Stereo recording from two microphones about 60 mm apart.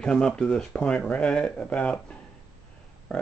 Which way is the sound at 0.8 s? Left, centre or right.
Left.